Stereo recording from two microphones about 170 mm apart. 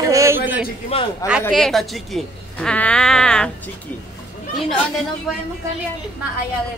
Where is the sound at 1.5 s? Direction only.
Centre (ahead or behind).